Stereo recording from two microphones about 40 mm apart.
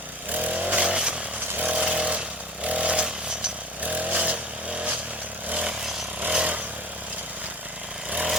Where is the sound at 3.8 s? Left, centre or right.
Right.